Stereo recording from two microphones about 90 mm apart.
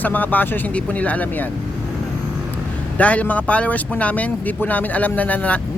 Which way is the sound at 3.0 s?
15° left (ahead or behind).